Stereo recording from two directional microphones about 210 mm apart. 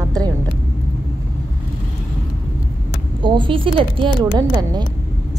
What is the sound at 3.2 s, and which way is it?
A woman's voice, 25° right (ahead or behind).